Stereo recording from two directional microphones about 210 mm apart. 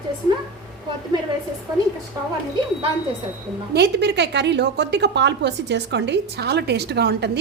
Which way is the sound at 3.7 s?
55° right (ahead or behind).